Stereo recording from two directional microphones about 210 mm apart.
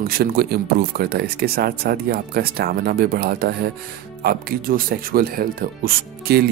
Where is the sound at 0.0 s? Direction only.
45° right (ahead or behind).